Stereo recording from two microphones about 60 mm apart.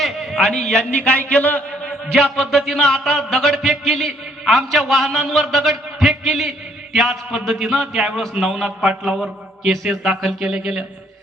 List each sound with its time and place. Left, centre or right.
0.0 s a sound: centre
0.4 s a man's voice: centre
0.9 s a man's voice: left
2.1 s a man's voice: centre
9.1 s mantra: centre
9.8 s a man's voice: centre